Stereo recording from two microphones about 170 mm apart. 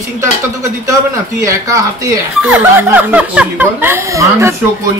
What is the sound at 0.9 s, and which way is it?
Speech, 20° right (ahead or behind).